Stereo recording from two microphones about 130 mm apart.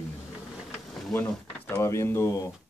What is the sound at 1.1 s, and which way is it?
Speech, 15° left (ahead or behind).